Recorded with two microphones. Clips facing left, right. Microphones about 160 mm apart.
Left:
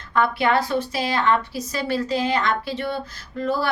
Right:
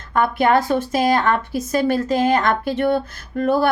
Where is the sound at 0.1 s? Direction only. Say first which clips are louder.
Right 3 dB; 45° right (ahead or behind).